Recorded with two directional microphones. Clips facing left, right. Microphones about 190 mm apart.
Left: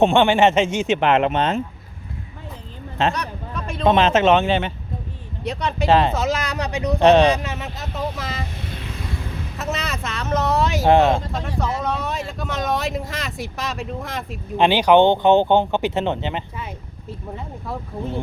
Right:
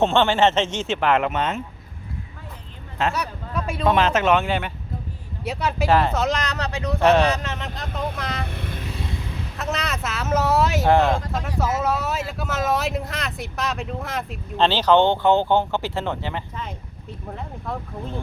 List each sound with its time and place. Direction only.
0.0 s speech: 15° left (ahead or behind); by 1.6 s 30° left (ahead or behind)
3.1 s speech: 5° right (ahead or behind)
3.8 s speech: 20° left (ahead or behind)
5.4 s speech: 5° right (ahead or behind)
5.9 s speech: 20° left (ahead or behind)
6.1 s speech: 5° left (ahead or behind)
8.4 s speech: 60° right (ahead or behind)
9.6 s speech: centre (ahead or behind)
10.8 s speech: 20° left (ahead or behind)
11.3 s speech: 5° right (ahead or behind)
14.5 s speech: 15° left (ahead or behind)
17.7 s speech: 5° left (ahead or behind)